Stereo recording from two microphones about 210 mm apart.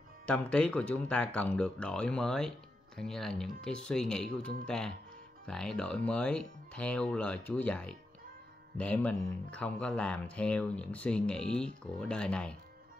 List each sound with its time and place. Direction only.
0.3 s speech: 5° left (ahead or behind)